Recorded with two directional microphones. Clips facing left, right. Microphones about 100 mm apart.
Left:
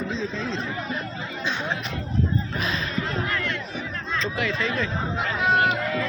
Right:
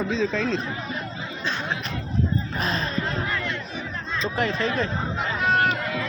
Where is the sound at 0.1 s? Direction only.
85° right.